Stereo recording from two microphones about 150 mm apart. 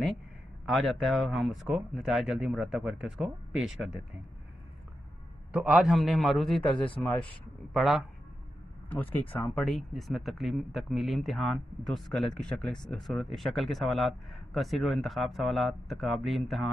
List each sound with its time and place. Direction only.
0.7 s speech: centre (ahead or behind)
5.5 s speech: 5° right (ahead or behind)
6.6 s speech: 35° left (ahead or behind)
7.7 s speech: centre (ahead or behind)
8.8 s speech: 10° left (ahead or behind)
9.6 s speech: centre (ahead or behind)